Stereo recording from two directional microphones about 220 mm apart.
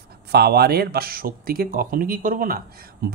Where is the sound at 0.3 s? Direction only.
45° right (ahead or behind).